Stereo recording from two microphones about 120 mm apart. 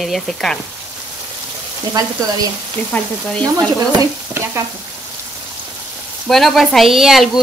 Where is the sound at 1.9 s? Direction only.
30° right (ahead or behind).